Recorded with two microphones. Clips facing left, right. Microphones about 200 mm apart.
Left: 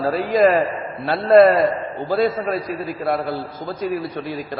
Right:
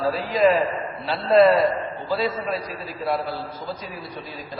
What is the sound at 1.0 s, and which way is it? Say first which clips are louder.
A man's voice: left 4 dB; 55° left (ahead or behind).